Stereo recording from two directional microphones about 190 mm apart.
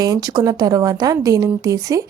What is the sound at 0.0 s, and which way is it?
A woman's voice, 20° right (ahead or behind).